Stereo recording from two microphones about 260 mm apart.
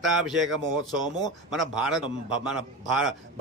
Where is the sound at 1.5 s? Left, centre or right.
Centre.